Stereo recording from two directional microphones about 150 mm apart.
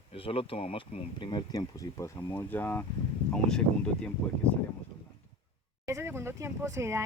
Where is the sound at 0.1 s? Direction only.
40° left (ahead or behind); by 3.6 s 5° left (ahead or behind).